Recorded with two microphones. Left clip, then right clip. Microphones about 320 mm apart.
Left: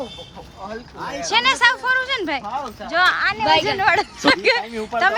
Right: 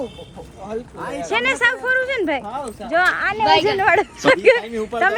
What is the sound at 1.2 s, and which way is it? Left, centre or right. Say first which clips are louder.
A woman's voice: left 2 dB; centre.